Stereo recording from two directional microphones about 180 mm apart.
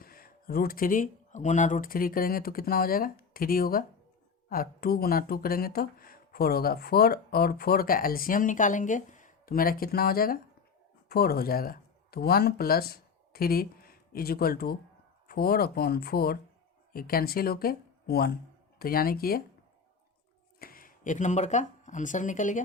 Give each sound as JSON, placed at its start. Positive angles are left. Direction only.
{"t": 0.0, "sound": "speech", "side_deg": 55}
{"t": 20.6, "sound": "speech", "side_deg": 55}